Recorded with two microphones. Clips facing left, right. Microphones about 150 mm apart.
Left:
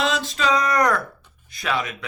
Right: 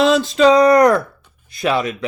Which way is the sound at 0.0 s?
30° right (ahead or behind).